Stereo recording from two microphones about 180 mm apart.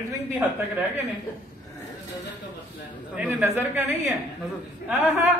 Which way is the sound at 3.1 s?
10° right (ahead or behind).